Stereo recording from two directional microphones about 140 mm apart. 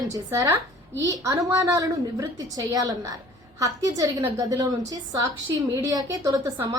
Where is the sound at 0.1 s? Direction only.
20° right (ahead or behind).